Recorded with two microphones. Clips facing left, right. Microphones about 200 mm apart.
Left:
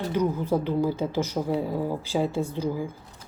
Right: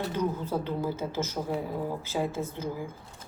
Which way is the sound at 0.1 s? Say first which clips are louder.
Left 5 dB; 10° left (ahead or behind).